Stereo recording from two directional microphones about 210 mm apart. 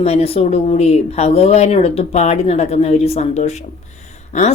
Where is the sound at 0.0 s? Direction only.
30° left (ahead or behind).